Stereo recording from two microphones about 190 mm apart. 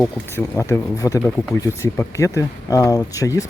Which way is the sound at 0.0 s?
15° left (ahead or behind).